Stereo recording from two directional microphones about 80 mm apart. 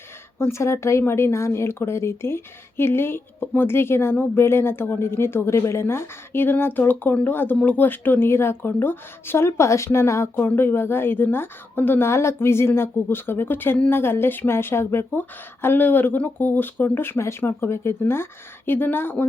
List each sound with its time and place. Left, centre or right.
0.3 s speech: left